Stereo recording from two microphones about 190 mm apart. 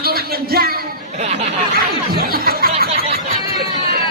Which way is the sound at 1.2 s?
40° right (ahead or behind).